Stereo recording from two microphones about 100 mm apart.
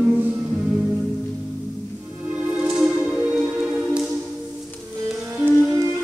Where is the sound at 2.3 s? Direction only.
10° right (ahead or behind).